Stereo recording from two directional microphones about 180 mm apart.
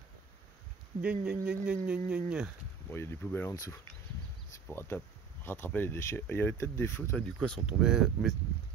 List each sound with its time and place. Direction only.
1.2 s speech: 10° right (ahead or behind)
2.9 s speech: 15° left (ahead or behind); by 8.4 s 5° right (ahead or behind)